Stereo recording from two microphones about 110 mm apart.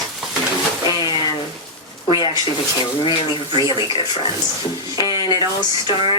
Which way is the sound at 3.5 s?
45° left (ahead or behind).